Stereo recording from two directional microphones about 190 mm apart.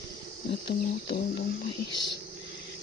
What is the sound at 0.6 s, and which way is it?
Speech, 50° left (ahead or behind).